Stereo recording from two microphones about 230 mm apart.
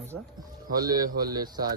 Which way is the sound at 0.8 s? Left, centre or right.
Centre.